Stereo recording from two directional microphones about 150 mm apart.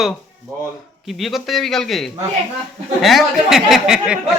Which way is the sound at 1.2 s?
Centre (ahead or behind).